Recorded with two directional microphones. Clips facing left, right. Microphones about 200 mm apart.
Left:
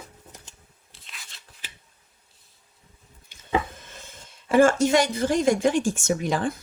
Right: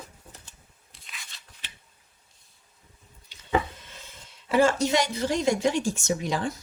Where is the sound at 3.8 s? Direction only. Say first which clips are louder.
Left 3 dB; 50° left (ahead or behind).